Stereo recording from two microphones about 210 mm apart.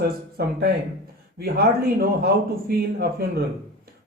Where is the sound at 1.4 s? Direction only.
45° right (ahead or behind).